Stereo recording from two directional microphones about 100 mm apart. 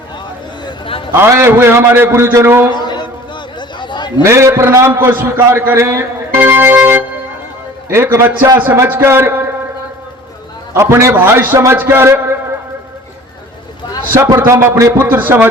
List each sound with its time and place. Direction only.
1.1 s speech: 25° right (ahead or behind)
2.7 s a sound: 45° left (ahead or behind)
3.8 s chatter: 50° left (ahead or behind)
4.2 s speech: 25° right (ahead or behind)
10.8 s speech: 30° right (ahead or behind)
14.3 s speech: 25° right (ahead or behind)